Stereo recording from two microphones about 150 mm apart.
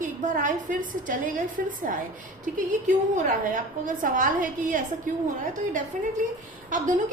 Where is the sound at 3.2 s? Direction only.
60° right (ahead or behind).